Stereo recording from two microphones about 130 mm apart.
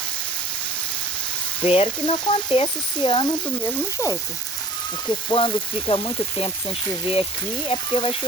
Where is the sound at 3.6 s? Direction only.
15° left (ahead or behind).